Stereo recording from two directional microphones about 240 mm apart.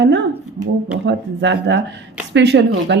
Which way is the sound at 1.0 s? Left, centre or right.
Right.